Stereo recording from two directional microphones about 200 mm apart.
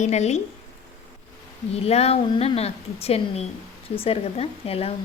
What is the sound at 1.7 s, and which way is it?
A woman's voice, 30° left (ahead or behind).